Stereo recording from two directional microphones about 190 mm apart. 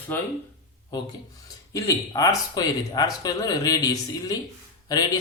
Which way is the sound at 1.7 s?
20° left (ahead or behind).